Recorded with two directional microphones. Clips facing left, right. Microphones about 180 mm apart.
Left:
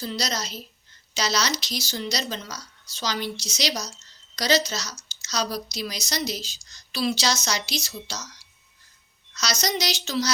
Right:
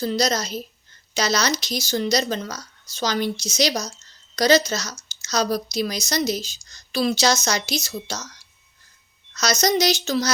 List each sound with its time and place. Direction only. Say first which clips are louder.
0.0 s a woman's voice: right 7 dB; 45° right (ahead or behind)